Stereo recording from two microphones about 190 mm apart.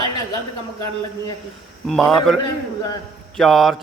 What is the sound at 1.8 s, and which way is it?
Speech, centre (ahead or behind).